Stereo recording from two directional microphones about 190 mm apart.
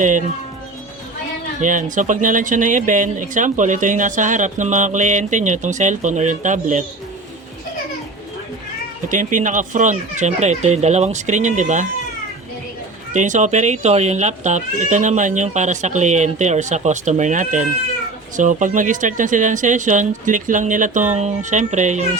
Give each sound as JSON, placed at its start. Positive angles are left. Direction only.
{"t": 0.0, "sound": "speech", "side_deg": -40}
{"t": 1.6, "sound": "speech", "side_deg": -40}
{"t": 9.0, "sound": "speech", "side_deg": -40}
{"t": 13.1, "sound": "speech", "side_deg": -40}